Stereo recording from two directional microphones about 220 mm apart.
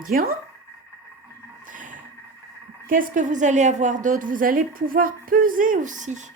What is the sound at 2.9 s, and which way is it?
Speech, 40° right (ahead or behind).